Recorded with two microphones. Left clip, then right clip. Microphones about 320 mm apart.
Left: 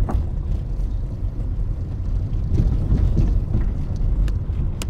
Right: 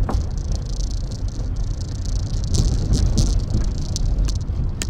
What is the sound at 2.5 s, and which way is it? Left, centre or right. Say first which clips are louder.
Vehicle: right 2 dB; right.